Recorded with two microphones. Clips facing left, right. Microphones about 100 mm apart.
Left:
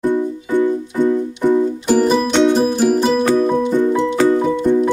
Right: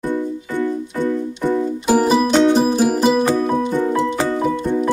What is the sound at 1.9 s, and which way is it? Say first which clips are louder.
Music: right 1 dB; 5° right (ahead or behind).